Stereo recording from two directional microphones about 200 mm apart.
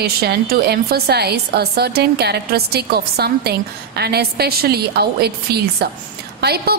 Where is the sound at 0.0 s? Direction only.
50° right (ahead or behind).